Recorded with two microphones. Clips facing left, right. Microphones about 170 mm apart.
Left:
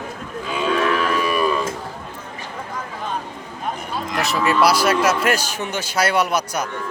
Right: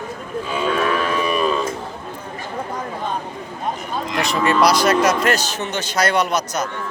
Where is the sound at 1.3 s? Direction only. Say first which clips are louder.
Right 1 dB; 25° right (ahead or behind).